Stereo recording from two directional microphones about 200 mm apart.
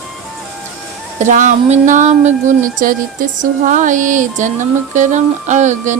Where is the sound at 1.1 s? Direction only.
40° right (ahead or behind).